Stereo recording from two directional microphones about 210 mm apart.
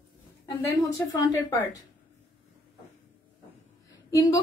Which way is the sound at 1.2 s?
10° left (ahead or behind).